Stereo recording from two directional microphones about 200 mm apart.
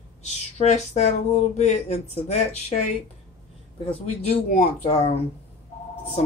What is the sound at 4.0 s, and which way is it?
Speech, 30° left (ahead or behind).